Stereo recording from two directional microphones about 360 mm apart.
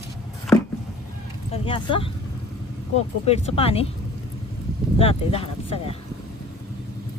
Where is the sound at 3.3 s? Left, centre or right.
Centre.